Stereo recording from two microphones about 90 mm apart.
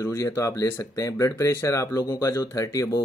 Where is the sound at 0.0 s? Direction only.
35° left (ahead or behind).